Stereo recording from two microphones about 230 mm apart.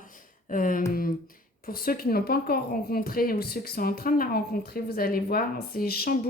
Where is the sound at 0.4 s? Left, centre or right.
Left.